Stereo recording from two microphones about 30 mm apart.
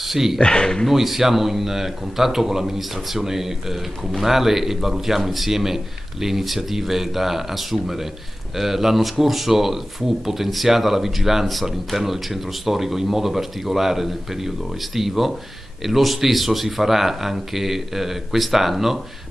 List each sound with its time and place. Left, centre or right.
0.0 s speech: centre
0.4 s speech: left
0.9 s speech: centre